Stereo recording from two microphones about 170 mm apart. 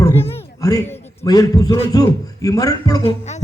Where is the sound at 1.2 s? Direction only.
20° left (ahead or behind).